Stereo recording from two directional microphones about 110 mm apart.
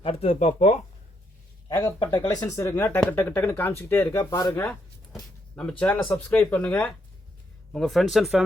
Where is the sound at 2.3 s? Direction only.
30° left (ahead or behind).